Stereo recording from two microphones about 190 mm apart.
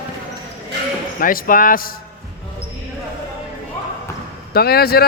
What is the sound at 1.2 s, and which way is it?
Speech, 45° left (ahead or behind).